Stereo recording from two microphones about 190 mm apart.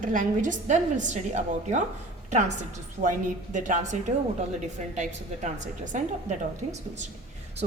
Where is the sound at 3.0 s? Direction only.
40° right (ahead or behind).